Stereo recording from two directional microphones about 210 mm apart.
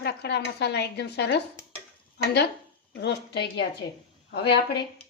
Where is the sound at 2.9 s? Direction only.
55° left (ahead or behind).